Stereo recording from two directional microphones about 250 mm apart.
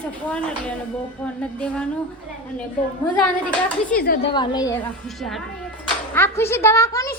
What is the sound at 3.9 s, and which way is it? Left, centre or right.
Speech, left.